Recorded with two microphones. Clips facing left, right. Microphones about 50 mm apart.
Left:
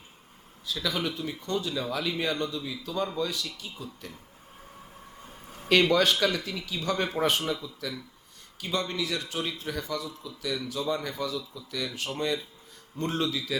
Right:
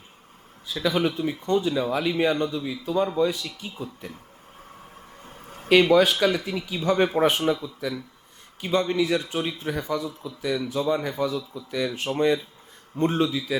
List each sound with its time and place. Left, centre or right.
0.7 s a man's voice: right
5.6 s a man's voice: centre